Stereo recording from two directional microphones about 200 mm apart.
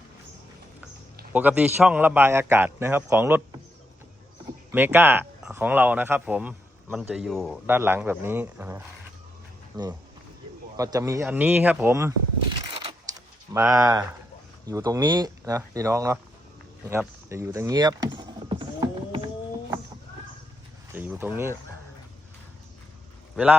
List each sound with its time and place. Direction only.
1.3 s speech: 10° right (ahead or behind)
4.7 s speech: 10° right (ahead or behind)
7.7 s speech: 10° right (ahead or behind)
9.7 s speech: 20° right (ahead or behind)
13.5 s speech: 15° right (ahead or behind)
20.9 s speech: 10° right (ahead or behind)
23.3 s a man's voice: 5° right (ahead or behind)